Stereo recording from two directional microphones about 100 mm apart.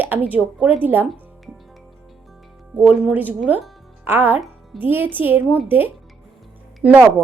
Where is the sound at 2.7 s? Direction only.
15° right (ahead or behind).